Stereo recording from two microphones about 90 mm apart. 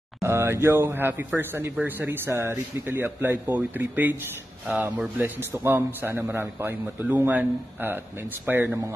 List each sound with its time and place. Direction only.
0.2 s speech: 30° right (ahead or behind)